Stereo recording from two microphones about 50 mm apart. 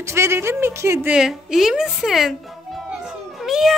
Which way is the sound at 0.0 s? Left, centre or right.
Right.